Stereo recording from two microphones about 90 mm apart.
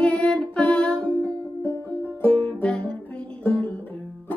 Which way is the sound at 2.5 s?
10° left (ahead or behind).